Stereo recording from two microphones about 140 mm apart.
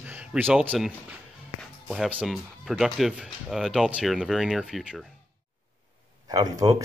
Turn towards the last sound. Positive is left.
turn(degrees=-25)  # may be behind; listen again after turning